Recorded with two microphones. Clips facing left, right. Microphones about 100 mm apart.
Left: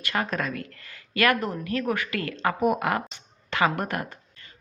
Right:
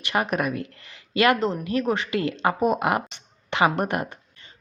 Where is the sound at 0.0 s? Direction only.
20° right (ahead or behind).